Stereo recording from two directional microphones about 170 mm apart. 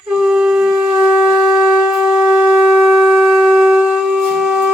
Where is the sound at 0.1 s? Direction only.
5° right (ahead or behind).